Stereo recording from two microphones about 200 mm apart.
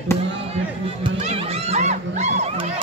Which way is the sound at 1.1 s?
30° right (ahead or behind).